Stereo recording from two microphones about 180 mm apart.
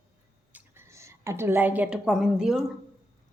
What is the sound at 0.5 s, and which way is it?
A woman's voice, 15° right (ahead or behind).